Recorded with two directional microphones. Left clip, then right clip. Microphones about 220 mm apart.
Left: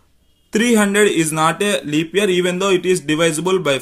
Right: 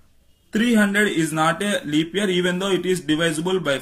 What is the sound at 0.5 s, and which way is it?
Speech, 45° left (ahead or behind).